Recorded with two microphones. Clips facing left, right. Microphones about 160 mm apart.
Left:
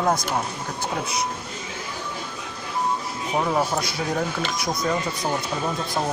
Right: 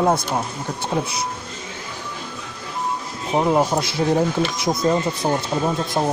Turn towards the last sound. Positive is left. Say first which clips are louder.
# right 5 dB
turn(degrees=-20)  # may be behind; listen again after turning